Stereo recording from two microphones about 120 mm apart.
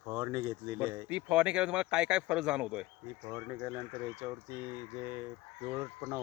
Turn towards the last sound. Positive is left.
turn(degrees=-15)  # may be behind; listen again after turning